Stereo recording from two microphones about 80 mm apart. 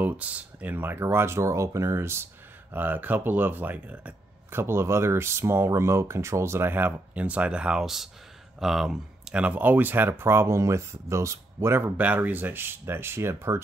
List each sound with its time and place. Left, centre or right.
0.0 s speech: centre
4.5 s speech: right
12.0 s speech: right